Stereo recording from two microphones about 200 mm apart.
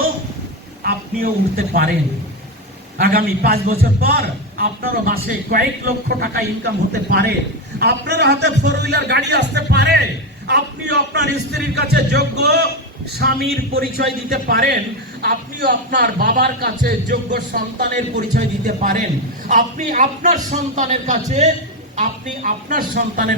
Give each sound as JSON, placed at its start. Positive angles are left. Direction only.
{"t": 0.9, "sound": "a man's voice", "side_deg": -50}
{"t": 3.0, "sound": "a man's voice", "side_deg": -50}